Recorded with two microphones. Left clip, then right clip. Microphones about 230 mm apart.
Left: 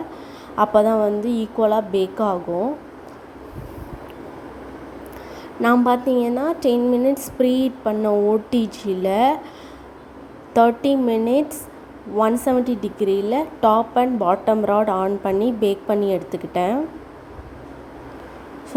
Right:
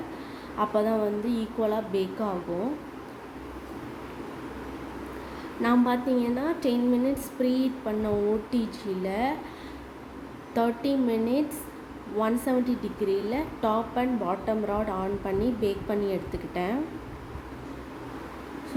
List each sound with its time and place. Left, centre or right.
0.5 s a woman's voice: left
5.6 s a woman's voice: left
10.5 s a woman's voice: left